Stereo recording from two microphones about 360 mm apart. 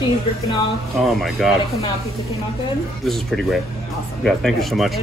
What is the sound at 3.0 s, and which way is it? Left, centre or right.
A man's voice, centre.